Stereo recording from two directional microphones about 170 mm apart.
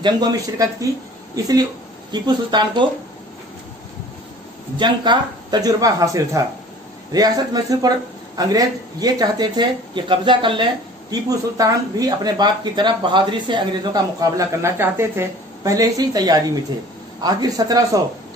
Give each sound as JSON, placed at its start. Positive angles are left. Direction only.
{"t": 0.0, "sound": "speech", "side_deg": -25}
{"t": 4.7, "sound": "speech", "side_deg": -25}